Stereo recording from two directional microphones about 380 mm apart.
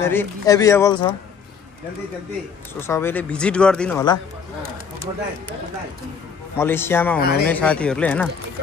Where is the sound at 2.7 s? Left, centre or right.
Centre.